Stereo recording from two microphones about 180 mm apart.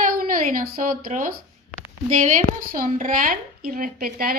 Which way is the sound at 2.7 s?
50° right (ahead or behind).